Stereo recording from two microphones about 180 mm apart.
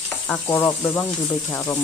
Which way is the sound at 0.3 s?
15° left (ahead or behind).